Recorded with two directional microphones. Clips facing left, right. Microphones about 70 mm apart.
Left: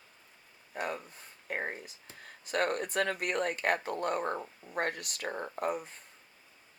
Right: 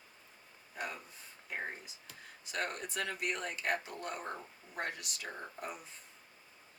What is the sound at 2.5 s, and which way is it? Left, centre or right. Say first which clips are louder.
Speech: left 8 dB; left.